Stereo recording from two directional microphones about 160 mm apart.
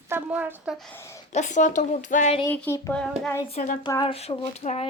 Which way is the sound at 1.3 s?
50° left (ahead or behind).